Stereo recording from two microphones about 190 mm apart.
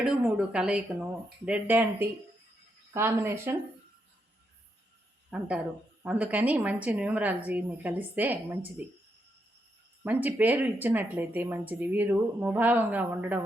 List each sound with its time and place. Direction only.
0.0 s a woman's voice: 5° right (ahead or behind)
5.3 s a woman's voice: 5° right (ahead or behind)
10.0 s speech: 10° right (ahead or behind)